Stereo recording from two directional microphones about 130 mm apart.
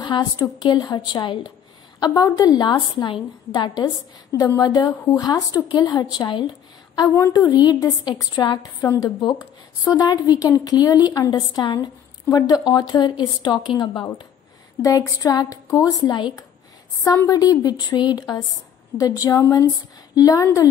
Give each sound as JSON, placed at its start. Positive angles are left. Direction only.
{"t": 0.0, "sound": "a woman's voice", "side_deg": 30}
{"t": 7.5, "sound": "a woman's voice", "side_deg": 35}
{"t": 17.3, "sound": "a woman's voice", "side_deg": 30}